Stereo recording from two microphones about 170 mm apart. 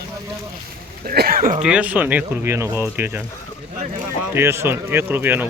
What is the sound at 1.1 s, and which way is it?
Speech, 60° right (ahead or behind).